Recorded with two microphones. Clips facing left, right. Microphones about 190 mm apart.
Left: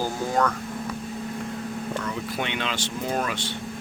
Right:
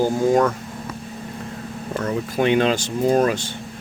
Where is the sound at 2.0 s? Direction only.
40° right (ahead or behind).